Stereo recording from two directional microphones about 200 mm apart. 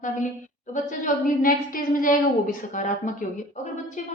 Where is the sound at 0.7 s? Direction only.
40° left (ahead or behind).